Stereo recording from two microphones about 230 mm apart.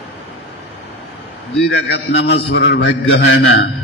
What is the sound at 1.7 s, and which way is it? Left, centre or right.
A man's voice, left.